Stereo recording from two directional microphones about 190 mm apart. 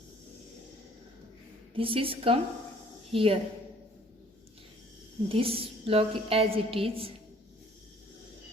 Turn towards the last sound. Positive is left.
turn(degrees=-30)  # may be behind; listen again after turning